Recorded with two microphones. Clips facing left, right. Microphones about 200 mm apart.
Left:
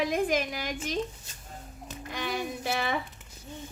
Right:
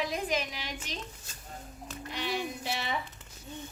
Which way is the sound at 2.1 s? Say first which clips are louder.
Left 2 dB; 50° left (ahead or behind).